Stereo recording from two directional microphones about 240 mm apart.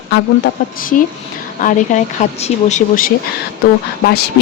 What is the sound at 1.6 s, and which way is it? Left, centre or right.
A woman's voice, left.